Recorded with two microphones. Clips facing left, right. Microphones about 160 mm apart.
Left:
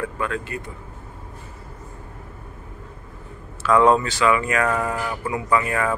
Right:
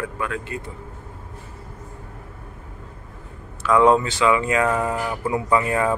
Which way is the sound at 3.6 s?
15° right (ahead or behind).